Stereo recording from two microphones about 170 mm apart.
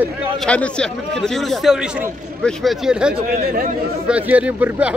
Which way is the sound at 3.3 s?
60° right (ahead or behind).